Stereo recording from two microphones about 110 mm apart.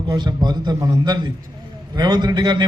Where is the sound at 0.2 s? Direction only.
40° right (ahead or behind).